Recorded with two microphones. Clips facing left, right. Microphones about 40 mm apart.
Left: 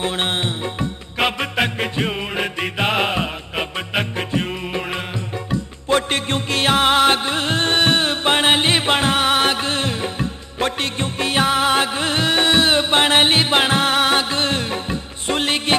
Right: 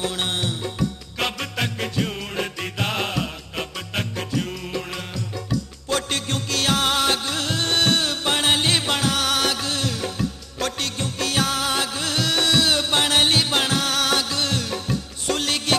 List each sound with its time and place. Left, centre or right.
0.0 s music: left